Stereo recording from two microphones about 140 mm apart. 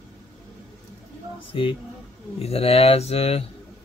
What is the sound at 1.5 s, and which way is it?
Speech, 40° left (ahead or behind).